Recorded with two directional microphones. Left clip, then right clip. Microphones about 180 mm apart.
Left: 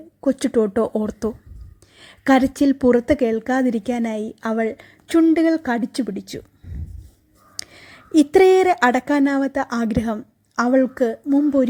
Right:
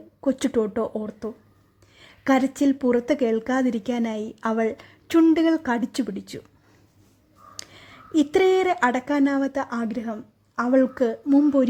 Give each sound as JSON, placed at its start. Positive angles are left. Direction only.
{"t": 0.2, "sound": "speech", "side_deg": 10}
{"t": 7.5, "sound": "speech", "side_deg": 10}
{"t": 10.7, "sound": "a woman's voice", "side_deg": 5}